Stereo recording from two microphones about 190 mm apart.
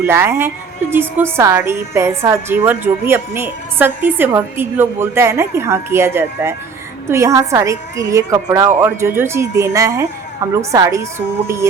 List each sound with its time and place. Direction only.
0.0 s a woman's voice: 15° right (ahead or behind)